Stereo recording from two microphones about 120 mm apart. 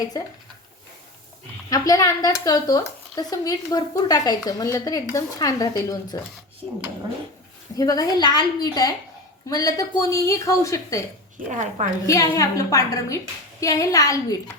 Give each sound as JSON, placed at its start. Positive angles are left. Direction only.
{"t": 0.1, "sound": "a woman's voice", "side_deg": 30}
{"t": 1.7, "sound": "a woman's voice", "side_deg": 30}
{"t": 7.8, "sound": "a woman's voice", "side_deg": 30}
{"t": 11.4, "sound": "a woman's voice", "side_deg": -90}
{"t": 12.0, "sound": "a woman's voice", "side_deg": 25}